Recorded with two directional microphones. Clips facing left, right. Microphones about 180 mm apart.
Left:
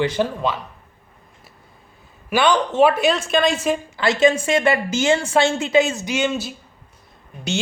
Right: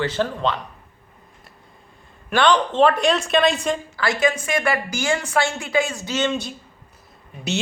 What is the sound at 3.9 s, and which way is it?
A woman's voice, 25° left (ahead or behind).